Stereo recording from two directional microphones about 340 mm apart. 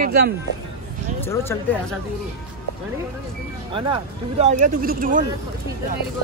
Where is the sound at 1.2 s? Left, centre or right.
Centre.